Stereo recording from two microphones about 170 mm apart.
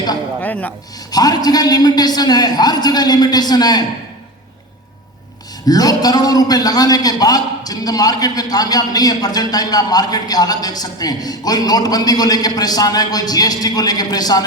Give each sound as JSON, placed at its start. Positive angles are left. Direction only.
{"t": 0.4, "sound": "speech", "side_deg": 10}
{"t": 1.1, "sound": "a man's voice", "side_deg": 25}
{"t": 5.6, "sound": "a man's voice", "side_deg": 20}